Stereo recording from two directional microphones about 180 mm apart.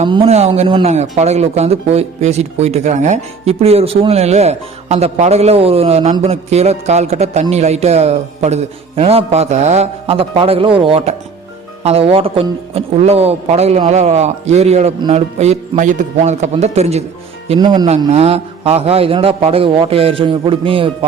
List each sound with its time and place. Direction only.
0.0 s speech: 30° right (ahead or behind)
17.5 s speech: 25° right (ahead or behind)
18.1 s speech: 35° right (ahead or behind)